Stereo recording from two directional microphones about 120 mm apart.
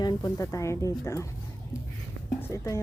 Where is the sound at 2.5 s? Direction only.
25° left (ahead or behind).